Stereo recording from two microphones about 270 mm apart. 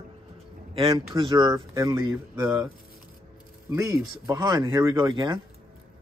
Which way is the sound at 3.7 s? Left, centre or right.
Centre.